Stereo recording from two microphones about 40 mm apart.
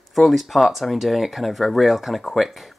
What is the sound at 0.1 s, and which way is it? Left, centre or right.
Speech, centre.